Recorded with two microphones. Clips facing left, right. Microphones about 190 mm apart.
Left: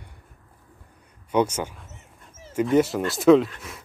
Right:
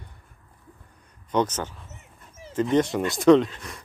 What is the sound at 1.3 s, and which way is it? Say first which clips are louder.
Speech: left 2 dB; 10° left (ahead or behind).